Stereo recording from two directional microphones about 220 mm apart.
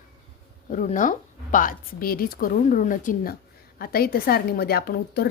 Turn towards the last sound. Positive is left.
turn(degrees=45)  # may be behind; listen again after turning